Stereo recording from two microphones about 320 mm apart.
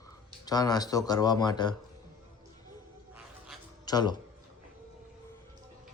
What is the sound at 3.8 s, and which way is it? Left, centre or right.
Speech, centre.